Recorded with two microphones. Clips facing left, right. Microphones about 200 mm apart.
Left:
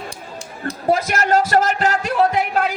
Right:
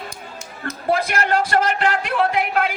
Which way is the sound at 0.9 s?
40° left (ahead or behind).